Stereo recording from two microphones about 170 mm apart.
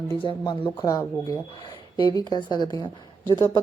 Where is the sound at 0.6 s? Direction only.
15° left (ahead or behind).